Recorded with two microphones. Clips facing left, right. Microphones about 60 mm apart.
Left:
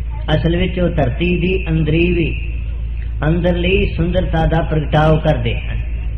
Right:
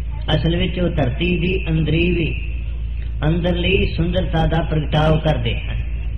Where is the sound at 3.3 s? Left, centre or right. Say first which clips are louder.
Left 3 dB; left; by 4.9 s centre.